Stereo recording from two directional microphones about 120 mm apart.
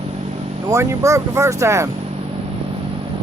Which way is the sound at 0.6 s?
25° right (ahead or behind).